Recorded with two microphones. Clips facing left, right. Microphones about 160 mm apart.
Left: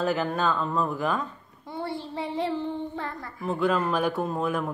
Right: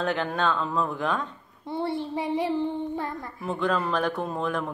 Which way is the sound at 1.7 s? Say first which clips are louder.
Right 4 dB; 25° right (ahead or behind).